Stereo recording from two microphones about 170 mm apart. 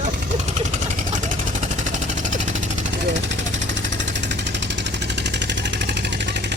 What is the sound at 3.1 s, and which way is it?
Vehicle, 90° right.